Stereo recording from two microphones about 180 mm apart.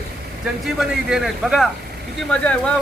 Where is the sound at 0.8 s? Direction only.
Centre (ahead or behind).